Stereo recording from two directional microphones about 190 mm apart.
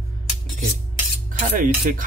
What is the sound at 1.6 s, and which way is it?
Rub, 45° right (ahead or behind).